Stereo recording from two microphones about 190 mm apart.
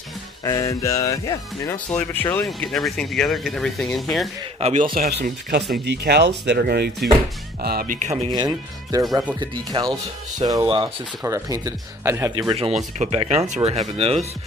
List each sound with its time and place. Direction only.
0.4 s speech: 15° left (ahead or behind); by 4.3 s centre (ahead or behind)
4.6 s speech: 35° right (ahead or behind)
4.9 s speech: 50° right (ahead or behind)
8.3 s speech: 20° right (ahead or behind)
12.5 s speech: 35° right (ahead or behind)